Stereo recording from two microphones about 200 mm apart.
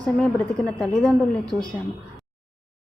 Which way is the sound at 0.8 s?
5° left (ahead or behind).